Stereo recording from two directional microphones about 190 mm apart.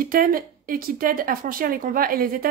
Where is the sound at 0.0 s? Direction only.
50° right (ahead or behind).